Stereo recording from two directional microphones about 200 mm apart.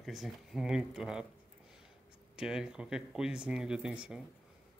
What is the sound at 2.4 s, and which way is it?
Speech, 5° right (ahead or behind).